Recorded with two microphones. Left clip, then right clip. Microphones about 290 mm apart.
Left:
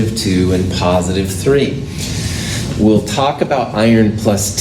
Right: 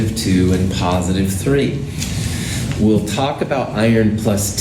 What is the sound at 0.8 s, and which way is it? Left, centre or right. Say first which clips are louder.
Speech: left 6 dB; left.